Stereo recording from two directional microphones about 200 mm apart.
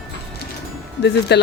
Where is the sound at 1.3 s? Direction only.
55° left (ahead or behind).